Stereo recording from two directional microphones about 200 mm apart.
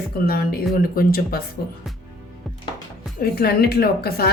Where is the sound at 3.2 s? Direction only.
50° left (ahead or behind).